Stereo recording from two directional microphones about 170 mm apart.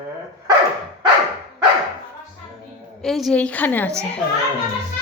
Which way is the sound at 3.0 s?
Centre (ahead or behind).